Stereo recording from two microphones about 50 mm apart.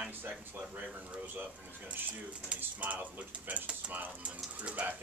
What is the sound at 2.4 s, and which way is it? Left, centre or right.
Speech, right.